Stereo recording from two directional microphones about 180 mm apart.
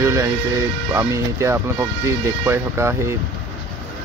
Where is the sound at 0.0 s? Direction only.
15° right (ahead or behind).